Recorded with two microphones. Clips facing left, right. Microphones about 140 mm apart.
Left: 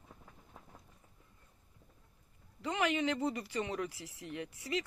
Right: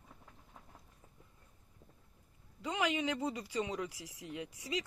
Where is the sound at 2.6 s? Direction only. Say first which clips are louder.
Left 2 dB; 15° right (ahead or behind).